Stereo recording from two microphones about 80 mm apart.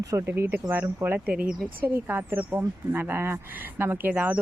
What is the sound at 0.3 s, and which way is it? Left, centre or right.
Speech, right.